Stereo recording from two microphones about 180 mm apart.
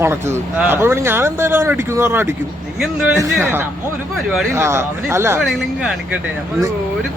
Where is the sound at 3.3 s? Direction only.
10° right (ahead or behind).